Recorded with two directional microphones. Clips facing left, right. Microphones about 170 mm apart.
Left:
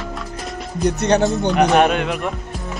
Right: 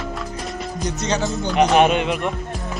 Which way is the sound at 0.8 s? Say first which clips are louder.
Left 8 dB; 60° left (ahead or behind).